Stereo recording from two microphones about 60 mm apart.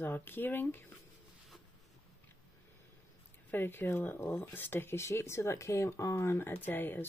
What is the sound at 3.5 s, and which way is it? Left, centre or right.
Speech, left.